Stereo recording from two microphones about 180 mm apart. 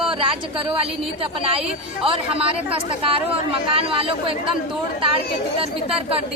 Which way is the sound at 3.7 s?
30° right (ahead or behind).